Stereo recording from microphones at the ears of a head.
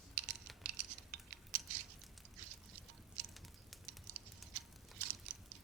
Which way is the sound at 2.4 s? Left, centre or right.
Right.